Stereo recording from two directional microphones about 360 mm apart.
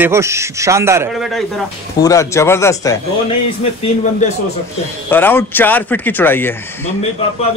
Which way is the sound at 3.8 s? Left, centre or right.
Centre.